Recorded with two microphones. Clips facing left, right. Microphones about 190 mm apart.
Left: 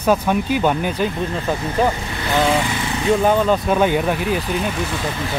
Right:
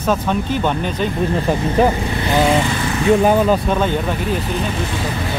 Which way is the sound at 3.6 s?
10° left (ahead or behind).